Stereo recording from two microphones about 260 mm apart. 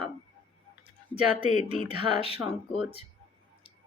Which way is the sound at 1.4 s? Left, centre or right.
Left.